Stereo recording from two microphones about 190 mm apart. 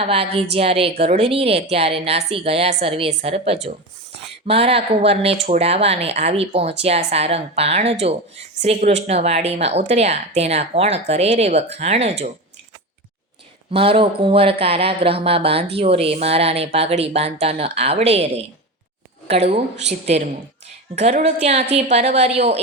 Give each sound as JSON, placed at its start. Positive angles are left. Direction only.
{"t": 0.0, "sound": "speech", "side_deg": -30}
{"t": 13.7, "sound": "speech", "side_deg": -30}